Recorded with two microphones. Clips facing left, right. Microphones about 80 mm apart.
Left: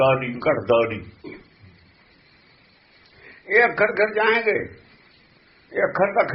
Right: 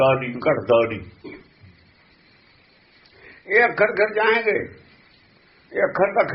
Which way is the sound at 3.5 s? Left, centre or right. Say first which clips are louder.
Right 1 dB; centre.